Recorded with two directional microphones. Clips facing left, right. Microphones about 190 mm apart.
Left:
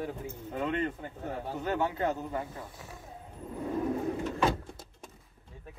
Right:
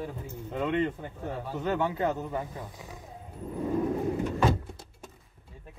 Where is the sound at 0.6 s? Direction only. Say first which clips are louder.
Right 4 dB; 20° right (ahead or behind).